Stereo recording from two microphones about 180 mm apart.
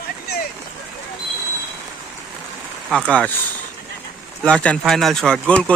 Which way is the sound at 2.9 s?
5° left (ahead or behind).